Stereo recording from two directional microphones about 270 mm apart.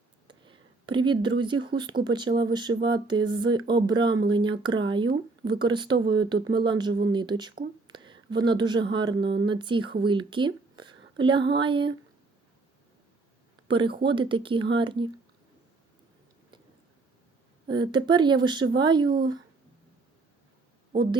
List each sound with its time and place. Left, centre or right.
0.3 s a woman's voice: centre
13.7 s speech: centre
17.7 s speech: centre